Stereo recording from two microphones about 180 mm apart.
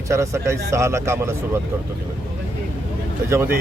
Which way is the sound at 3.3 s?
15° right (ahead or behind).